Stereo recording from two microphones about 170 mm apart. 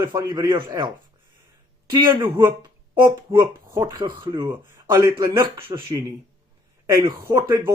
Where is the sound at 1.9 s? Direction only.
15° right (ahead or behind).